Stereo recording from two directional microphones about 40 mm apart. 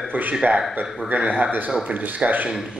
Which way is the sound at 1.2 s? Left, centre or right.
Right.